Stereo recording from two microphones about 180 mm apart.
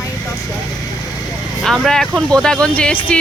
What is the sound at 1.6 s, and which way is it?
Speech, centre (ahead or behind).